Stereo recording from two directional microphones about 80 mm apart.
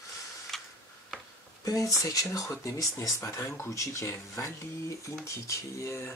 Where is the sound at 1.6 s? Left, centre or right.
Left.